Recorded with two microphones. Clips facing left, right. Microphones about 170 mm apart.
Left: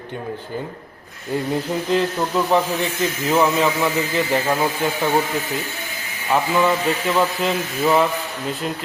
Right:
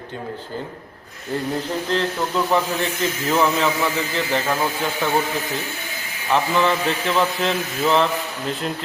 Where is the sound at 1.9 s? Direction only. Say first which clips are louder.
Left 3 dB; 15° left (ahead or behind).